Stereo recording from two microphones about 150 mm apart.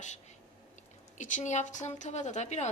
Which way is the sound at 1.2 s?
55° left (ahead or behind).